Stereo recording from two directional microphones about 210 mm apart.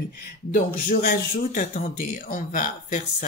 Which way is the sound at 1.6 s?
35° left (ahead or behind).